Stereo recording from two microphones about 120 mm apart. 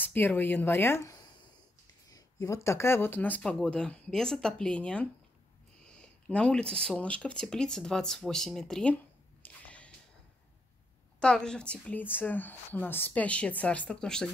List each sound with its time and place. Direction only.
0.0 s speech: 15° left (ahead or behind)
11.1 s speech: 5° left (ahead or behind)